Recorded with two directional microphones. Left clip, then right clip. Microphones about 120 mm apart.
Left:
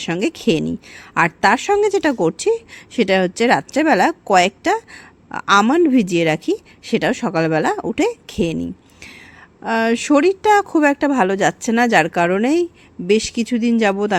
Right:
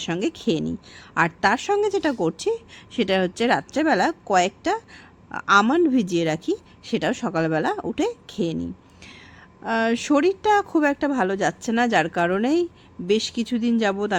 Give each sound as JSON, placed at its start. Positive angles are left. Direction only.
{"t": 0.0, "sound": "a woman's voice", "side_deg": 40}